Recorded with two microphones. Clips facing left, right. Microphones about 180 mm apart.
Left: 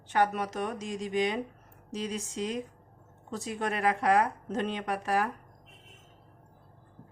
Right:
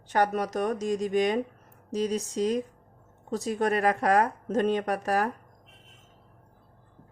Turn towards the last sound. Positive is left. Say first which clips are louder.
# right 3 dB
turn(degrees=-45)  # may be behind; listen again after turning